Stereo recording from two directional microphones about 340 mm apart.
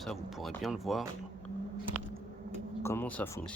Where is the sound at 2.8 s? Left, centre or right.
Centre.